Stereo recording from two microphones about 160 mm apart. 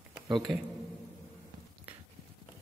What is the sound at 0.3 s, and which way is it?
Speech, centre (ahead or behind).